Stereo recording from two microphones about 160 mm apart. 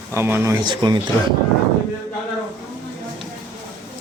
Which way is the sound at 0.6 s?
30° right (ahead or behind).